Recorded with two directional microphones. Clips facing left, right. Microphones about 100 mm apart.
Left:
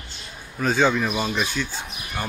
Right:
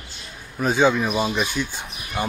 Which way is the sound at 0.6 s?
15° right (ahead or behind).